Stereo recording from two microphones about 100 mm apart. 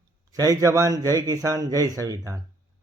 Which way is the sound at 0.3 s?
35° right (ahead or behind).